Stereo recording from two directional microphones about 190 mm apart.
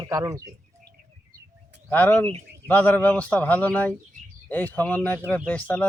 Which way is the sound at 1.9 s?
10° left (ahead or behind).